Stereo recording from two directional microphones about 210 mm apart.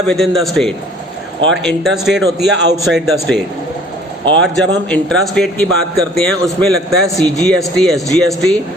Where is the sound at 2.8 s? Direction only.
Centre (ahead or behind).